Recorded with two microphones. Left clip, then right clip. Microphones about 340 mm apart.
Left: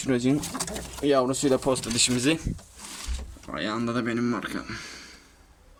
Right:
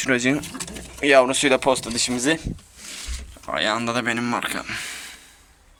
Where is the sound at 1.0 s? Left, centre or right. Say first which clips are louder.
Right 7 dB; right.